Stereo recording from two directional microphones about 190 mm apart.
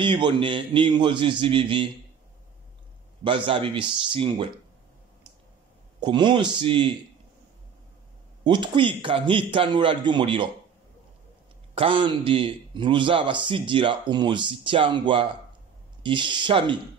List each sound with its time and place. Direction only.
0.0 s a man's voice: 25° right (ahead or behind)
3.3 s a man's voice: 25° right (ahead or behind)
5.9 s a man's voice: 25° right (ahead or behind)
8.5 s a man's voice: 25° right (ahead or behind)
11.7 s a man's voice: 25° right (ahead or behind)